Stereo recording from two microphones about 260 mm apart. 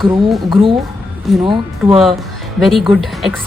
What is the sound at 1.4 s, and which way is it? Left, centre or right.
Speech, centre.